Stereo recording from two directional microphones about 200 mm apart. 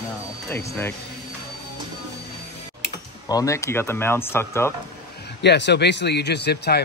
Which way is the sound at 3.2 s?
15° left (ahead or behind).